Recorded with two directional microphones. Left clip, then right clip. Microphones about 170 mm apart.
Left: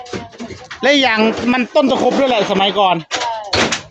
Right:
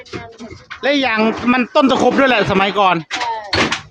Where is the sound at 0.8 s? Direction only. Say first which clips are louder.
Left 3 dB; 10° left (ahead or behind).